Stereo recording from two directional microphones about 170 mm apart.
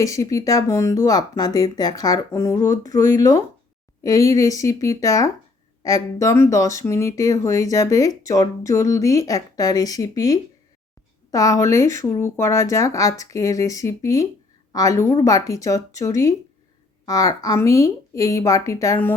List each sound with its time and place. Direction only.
0.0 s speech: 20° left (ahead or behind)